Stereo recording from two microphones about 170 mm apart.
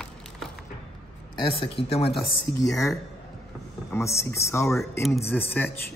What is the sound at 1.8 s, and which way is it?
Speech, 35° left (ahead or behind).